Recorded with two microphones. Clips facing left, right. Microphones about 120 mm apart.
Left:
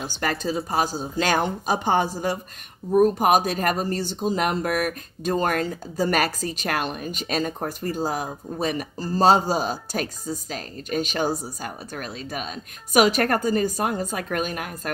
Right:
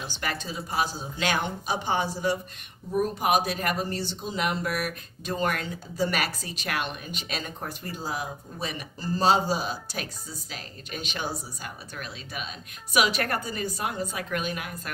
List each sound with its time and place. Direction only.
0.0 s speech: 40° left (ahead or behind)